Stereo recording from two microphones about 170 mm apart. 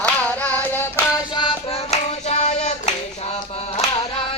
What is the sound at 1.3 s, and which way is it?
Hands, 30° left (ahead or behind).